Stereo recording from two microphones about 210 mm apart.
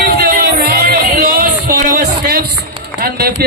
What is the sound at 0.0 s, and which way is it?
Music, 45° right (ahead or behind).